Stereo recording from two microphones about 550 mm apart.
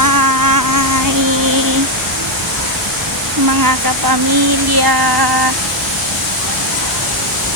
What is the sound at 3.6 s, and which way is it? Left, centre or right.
Speech, right.